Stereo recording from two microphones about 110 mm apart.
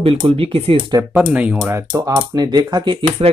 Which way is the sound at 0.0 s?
55° right (ahead or behind).